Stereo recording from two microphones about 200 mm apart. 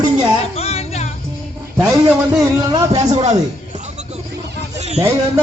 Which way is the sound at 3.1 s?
35° right (ahead or behind).